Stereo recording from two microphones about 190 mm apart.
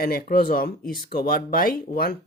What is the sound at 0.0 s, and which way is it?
Speech, 50° left (ahead or behind).